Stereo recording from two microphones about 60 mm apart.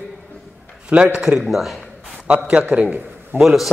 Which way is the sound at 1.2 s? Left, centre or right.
Centre.